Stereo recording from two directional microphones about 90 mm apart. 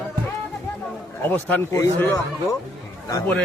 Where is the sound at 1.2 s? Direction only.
25° left (ahead or behind).